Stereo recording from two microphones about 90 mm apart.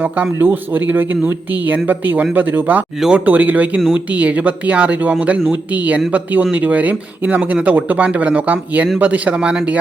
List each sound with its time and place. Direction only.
0.0 s speech: 20° right (ahead or behind)